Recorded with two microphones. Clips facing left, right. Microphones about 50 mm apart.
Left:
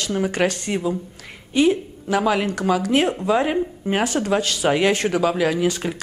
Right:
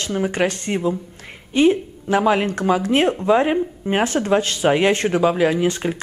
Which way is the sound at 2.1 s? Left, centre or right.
Right.